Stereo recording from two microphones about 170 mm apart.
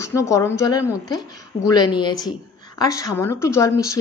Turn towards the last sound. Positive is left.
turn(degrees=20)  # may be behind; listen again after turning